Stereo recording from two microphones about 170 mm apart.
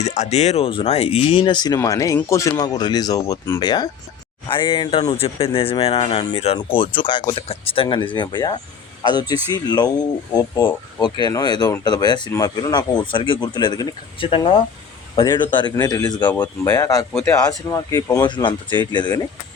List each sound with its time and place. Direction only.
0.0 s speech: 40° left (ahead or behind); by 3.7 s 20° left (ahead or behind)
4.4 s a man's voice: 30° left (ahead or behind)